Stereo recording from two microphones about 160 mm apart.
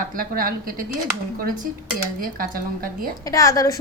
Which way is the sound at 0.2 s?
65° right (ahead or behind).